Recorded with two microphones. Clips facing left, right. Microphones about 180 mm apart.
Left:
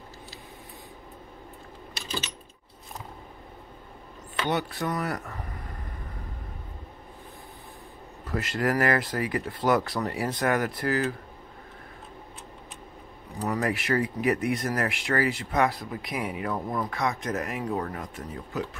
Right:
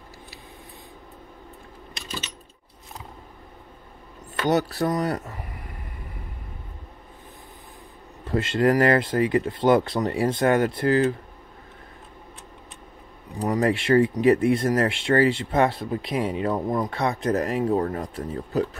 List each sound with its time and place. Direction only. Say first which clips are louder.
4.5 s speech: right 7 dB; 40° right (ahead or behind)
8.3 s speech: right 6 dB; 25° right (ahead or behind)
13.5 s speech: right 6 dB; 30° right (ahead or behind)